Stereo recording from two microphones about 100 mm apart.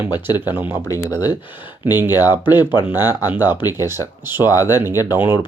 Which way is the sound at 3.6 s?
40° left (ahead or behind).